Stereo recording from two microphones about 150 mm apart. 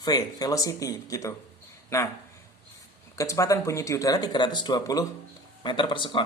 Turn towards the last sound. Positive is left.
turn(degrees=30)  # may be behind; listen again after turning